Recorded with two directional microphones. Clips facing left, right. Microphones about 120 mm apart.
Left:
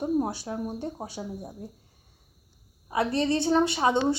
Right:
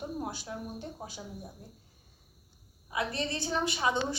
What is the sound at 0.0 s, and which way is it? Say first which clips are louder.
A woman's voice: left 10 dB; 35° left (ahead or behind).